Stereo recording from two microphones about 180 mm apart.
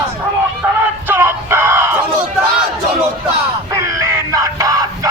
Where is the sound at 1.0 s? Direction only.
10° right (ahead or behind).